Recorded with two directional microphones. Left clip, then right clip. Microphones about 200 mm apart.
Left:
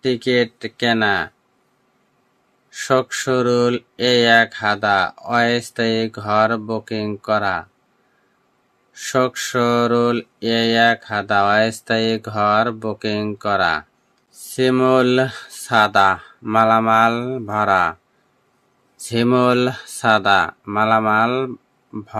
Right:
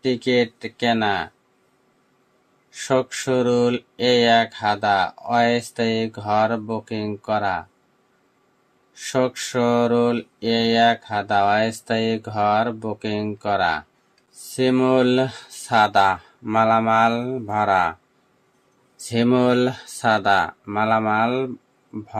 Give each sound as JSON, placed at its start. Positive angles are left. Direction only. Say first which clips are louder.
{"t": 0.0, "sound": "mantra", "louder": "left 2 dB", "side_deg": 20}
{"t": 2.6, "sound": "mantra", "louder": "left 3 dB", "side_deg": 25}
{"t": 8.9, "sound": "mantra", "louder": "left 3 dB", "side_deg": 25}
{"t": 18.9, "sound": "mantra", "louder": "left 3 dB", "side_deg": 20}